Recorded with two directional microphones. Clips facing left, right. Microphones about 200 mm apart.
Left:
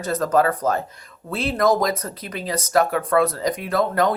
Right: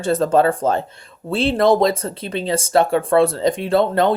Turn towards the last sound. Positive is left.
turn(degrees=-30)  # may be behind; listen again after turning